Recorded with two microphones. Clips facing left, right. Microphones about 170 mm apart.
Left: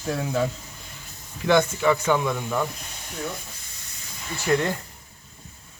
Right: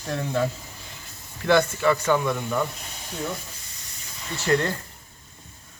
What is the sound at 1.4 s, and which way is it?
Speech, 15° left (ahead or behind).